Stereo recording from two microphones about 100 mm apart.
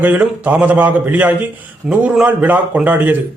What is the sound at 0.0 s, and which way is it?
A man's voice, 20° right (ahead or behind).